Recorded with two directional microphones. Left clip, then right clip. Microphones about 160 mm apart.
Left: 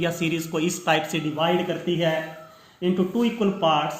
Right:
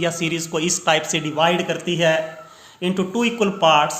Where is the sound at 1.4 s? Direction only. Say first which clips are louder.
Right 5 dB; 30° right (ahead or behind).